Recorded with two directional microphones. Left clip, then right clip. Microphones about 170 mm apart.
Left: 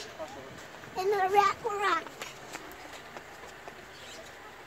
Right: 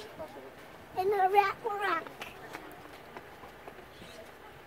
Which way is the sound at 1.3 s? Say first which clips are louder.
Left 2 dB; 35° right (ahead or behind).